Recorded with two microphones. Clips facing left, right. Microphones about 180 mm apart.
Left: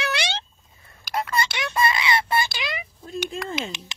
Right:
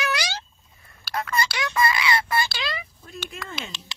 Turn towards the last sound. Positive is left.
turn(degrees=20)  # may be behind; listen again after turning